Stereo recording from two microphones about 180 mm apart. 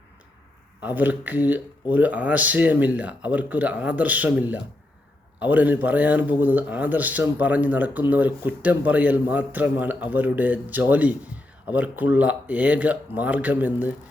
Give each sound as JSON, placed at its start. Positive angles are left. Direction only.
{"t": 0.8, "sound": "speech", "side_deg": -10}